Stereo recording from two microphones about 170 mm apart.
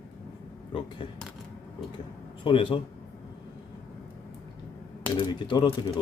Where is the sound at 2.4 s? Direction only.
30° left (ahead or behind).